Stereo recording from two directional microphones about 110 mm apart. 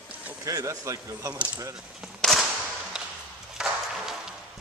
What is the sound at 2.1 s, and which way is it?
Whip, 5° left (ahead or behind).